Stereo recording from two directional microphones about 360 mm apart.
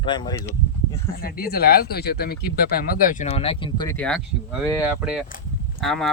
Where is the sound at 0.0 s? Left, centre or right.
Centre.